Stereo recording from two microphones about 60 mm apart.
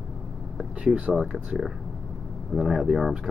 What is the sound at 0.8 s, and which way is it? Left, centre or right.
Speech, right.